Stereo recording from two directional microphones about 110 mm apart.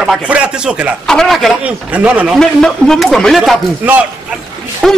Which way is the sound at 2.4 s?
5° left (ahead or behind).